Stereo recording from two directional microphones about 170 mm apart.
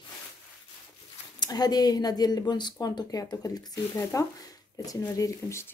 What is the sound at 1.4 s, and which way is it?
Speech, 25° left (ahead or behind).